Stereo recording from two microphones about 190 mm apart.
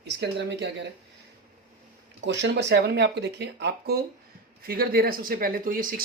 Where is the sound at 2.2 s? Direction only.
70° right (ahead or behind).